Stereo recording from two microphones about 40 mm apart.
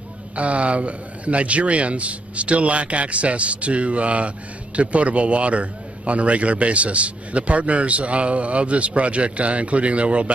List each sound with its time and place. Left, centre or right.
0.4 s a man's voice: right